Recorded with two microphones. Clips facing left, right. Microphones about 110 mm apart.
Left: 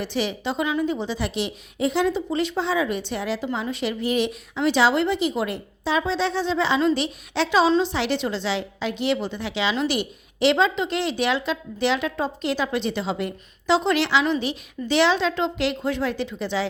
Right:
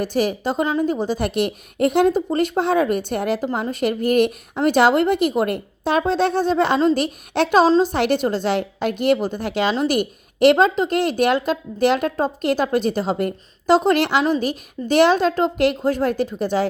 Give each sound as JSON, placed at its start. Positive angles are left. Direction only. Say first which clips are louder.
{"t": 0.0, "sound": "a woman's voice", "louder": "right 5 dB", "side_deg": -45}